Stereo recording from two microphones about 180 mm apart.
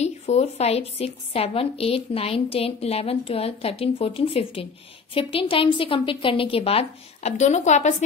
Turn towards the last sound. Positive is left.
turn(degrees=40)  # may be behind; listen again after turning